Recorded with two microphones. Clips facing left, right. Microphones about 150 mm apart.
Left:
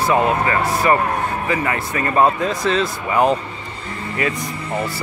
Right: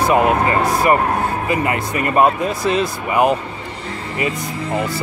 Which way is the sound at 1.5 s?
15° right (ahead or behind).